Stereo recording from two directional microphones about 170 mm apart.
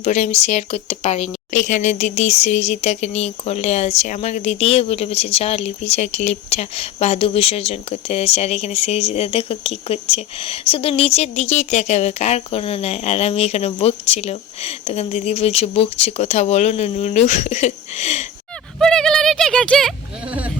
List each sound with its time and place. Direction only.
0.0 s speech: 40° left (ahead or behind)
18.8 s speech: 5° left (ahead or behind)
20.2 s speech: 10° right (ahead or behind)